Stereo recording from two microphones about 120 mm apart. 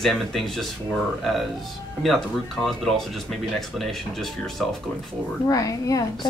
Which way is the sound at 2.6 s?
Centre (ahead or behind).